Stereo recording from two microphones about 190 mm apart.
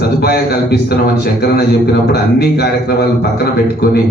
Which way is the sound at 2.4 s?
55° left (ahead or behind).